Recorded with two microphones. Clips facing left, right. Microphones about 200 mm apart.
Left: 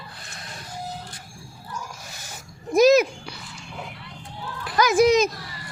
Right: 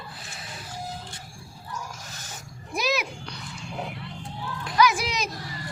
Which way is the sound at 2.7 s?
45° left (ahead or behind).